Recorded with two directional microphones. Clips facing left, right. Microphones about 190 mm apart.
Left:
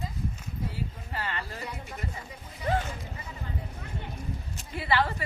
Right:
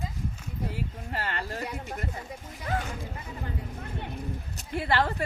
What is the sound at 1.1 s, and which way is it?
Speech, 50° right (ahead or behind).